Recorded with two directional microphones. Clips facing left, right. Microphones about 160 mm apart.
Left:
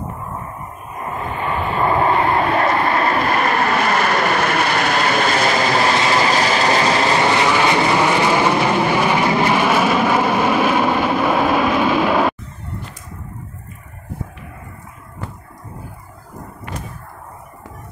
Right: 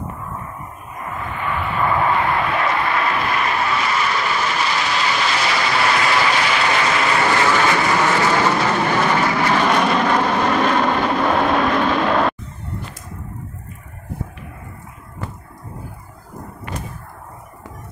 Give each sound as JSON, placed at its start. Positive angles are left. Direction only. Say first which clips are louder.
{"t": 1.0, "sound": "vehicle", "louder": "left 3 dB", "side_deg": 30}